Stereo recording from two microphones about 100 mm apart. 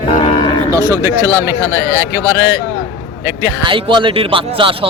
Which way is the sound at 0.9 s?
35° right (ahead or behind).